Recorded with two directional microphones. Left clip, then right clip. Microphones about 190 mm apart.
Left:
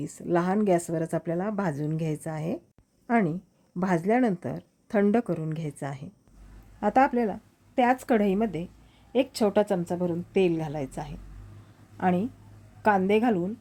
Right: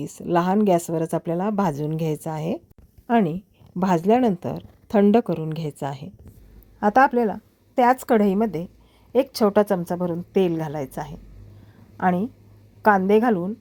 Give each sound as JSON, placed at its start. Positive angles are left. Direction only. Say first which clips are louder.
{"t": 0.2, "sound": "a woman's voice", "louder": "right 5 dB", "side_deg": -25}